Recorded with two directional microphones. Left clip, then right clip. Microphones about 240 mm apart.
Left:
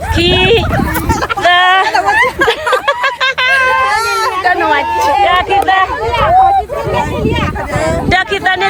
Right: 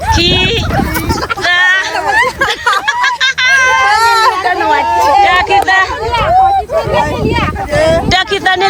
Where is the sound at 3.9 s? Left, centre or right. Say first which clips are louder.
Right 5 dB; centre.